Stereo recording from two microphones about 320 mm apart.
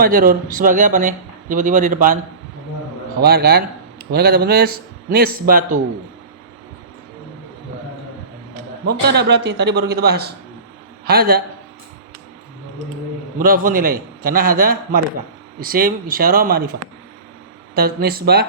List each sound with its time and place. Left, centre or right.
0.0 s speech: right
3.2 s a man's voice: right
8.9 s a man's voice: right
13.4 s speech: right
17.7 s speech: right